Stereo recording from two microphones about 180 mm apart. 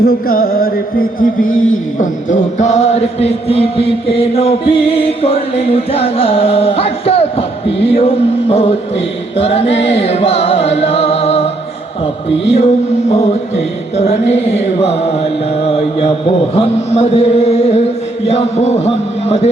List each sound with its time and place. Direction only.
0.0 s music: 55° left (ahead or behind)
1.5 s a man's voice: 90° left
2.0 s chant: 45° left (ahead or behind)
12.5 s chant: 35° left (ahead or behind)